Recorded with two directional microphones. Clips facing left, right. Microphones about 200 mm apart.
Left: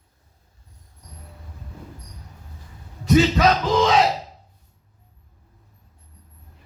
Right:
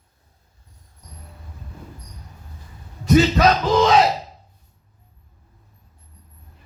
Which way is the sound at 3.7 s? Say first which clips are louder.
Right 2 dB; 40° right (ahead or behind).